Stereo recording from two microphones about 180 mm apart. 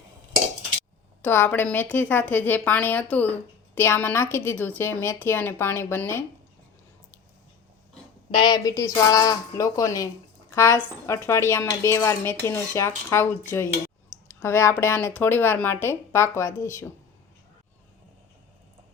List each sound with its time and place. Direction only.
1.2 s speech: 10° left (ahead or behind)
8.3 s a woman's voice: 25° left (ahead or behind)